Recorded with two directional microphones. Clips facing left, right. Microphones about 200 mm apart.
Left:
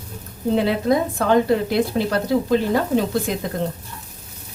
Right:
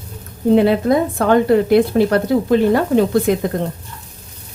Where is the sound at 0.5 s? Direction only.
55° right (ahead or behind).